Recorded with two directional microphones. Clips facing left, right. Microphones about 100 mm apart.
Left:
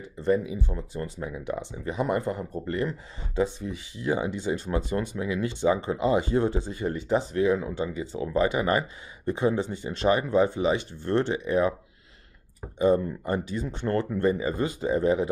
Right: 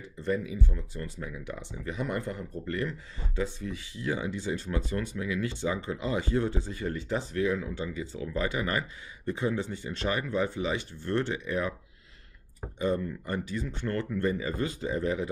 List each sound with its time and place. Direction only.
0.2 s speech: 20° left (ahead or behind)
12.7 s speech: 20° left (ahead or behind)